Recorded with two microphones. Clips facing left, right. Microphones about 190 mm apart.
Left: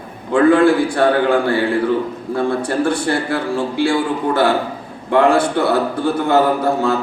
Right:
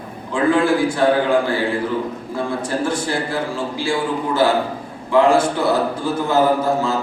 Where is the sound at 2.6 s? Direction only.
60° left (ahead or behind).